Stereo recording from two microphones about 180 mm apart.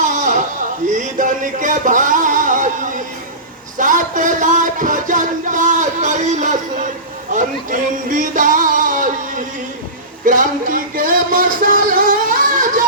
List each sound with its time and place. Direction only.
0.0 s a sound: 45° right (ahead or behind)
3.8 s speech: 45° right (ahead or behind)
10.2 s music: 45° right (ahead or behind)